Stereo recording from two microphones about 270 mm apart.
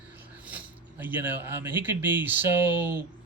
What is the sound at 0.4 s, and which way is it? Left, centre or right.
Speech, centre.